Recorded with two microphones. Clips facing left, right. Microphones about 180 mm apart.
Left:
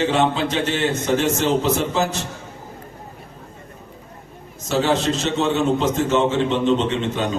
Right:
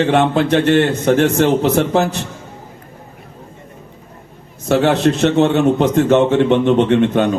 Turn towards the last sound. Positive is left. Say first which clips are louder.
# right 9 dB
turn(degrees=-60)  # may be behind; listen again after turning